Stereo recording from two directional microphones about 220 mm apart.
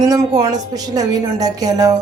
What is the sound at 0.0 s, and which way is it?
A woman's voice, 15° right (ahead or behind).